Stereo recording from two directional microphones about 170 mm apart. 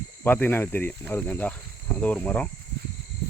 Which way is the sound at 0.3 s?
10° left (ahead or behind).